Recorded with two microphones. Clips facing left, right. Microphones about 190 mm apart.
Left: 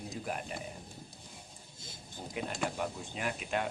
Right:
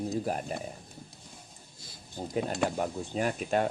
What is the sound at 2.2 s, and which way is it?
Speech, 40° right (ahead or behind).